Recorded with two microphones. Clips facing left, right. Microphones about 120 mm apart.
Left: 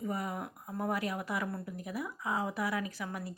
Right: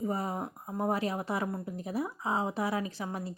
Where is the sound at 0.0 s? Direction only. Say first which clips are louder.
Right 4 dB; 30° right (ahead or behind).